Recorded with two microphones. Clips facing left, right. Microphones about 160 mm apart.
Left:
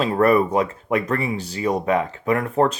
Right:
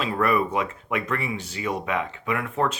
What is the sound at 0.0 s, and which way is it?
Speech, 40° left (ahead or behind).